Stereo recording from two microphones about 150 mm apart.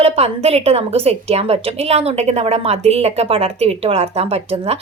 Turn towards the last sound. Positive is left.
turn(degrees=-45)  # may be behind; listen again after turning